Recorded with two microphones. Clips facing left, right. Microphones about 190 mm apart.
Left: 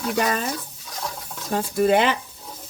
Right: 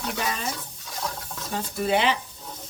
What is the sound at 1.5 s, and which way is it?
Speech, 50° left (ahead or behind).